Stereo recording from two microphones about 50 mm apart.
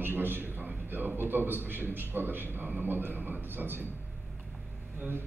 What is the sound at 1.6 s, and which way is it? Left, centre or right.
A man's voice, right.